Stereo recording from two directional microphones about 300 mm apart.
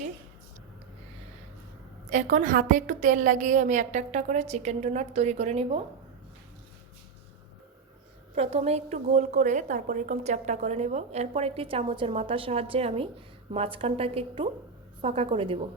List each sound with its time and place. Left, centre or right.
2.0 s a woman's voice: right
8.4 s a woman's voice: centre